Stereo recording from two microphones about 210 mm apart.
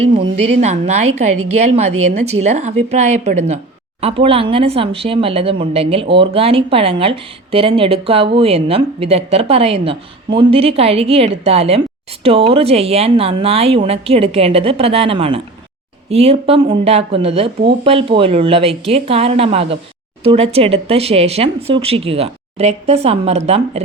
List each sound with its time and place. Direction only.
0.0 s a woman's voice: 25° right (ahead or behind)